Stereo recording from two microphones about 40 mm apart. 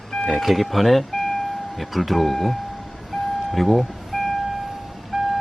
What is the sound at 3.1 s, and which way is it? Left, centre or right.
Vehicle, centre.